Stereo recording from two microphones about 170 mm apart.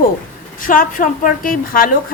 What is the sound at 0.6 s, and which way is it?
A woman's voice, 55° left (ahead or behind).